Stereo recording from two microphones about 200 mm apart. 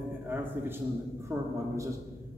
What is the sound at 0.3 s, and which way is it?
Speech, 10° right (ahead or behind).